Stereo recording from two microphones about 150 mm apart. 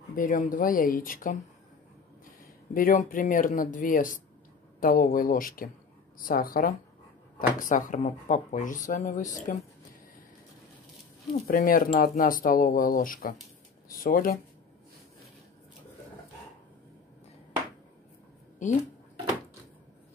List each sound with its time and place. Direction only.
0.1 s speech: 65° left (ahead or behind)
2.7 s speech: 65° left (ahead or behind)
11.4 s speech: 75° left (ahead or behind)